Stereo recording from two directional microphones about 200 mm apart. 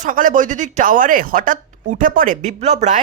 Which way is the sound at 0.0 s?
40° right (ahead or behind).